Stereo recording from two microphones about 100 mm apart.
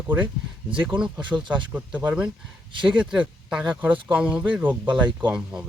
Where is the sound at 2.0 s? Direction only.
15° right (ahead or behind).